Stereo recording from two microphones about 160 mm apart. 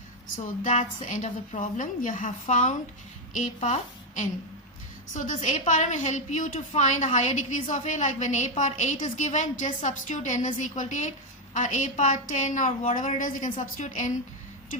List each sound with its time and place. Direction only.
0.4 s a woman's voice: 50° left (ahead or behind)